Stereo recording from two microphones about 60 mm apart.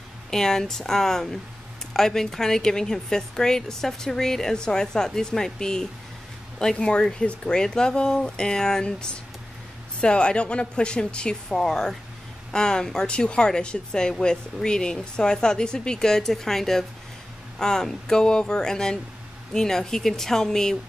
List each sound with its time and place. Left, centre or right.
0.3 s speech: centre